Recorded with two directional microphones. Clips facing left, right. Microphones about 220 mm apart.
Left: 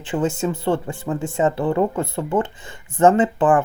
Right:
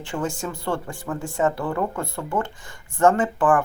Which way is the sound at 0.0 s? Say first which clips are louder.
Left 6 dB; 20° left (ahead or behind).